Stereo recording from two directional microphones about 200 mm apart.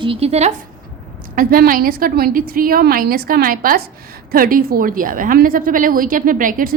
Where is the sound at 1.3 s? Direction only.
45° right (ahead or behind).